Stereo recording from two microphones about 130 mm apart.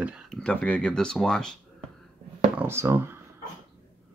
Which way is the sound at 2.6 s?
20° right (ahead or behind).